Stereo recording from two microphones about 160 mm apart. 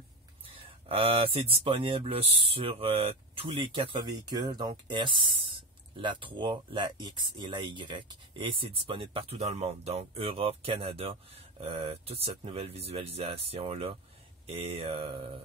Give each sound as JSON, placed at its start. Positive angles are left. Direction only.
{"t": 0.8, "sound": "speech", "side_deg": -35}